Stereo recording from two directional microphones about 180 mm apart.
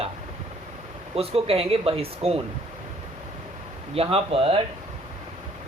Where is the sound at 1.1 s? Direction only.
35° right (ahead or behind).